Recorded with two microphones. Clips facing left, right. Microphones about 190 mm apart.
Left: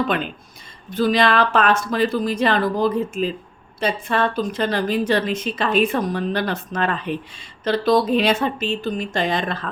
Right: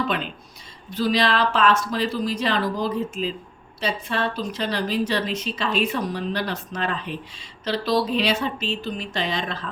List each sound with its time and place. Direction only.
0.9 s a woman's voice: 50° left (ahead or behind)